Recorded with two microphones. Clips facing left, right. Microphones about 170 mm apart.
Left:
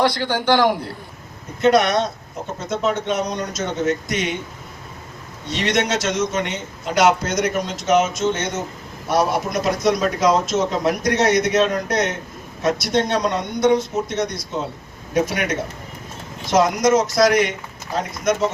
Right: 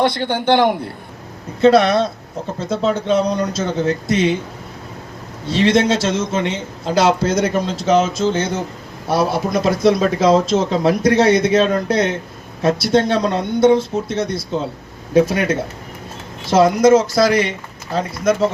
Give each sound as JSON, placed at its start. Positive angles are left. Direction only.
{"t": 0.0, "sound": "a man's voice", "side_deg": -25}
{"t": 5.5, "sound": "a man's voice", "side_deg": -30}